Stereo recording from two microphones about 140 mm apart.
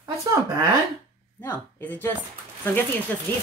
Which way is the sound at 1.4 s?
15° left (ahead or behind).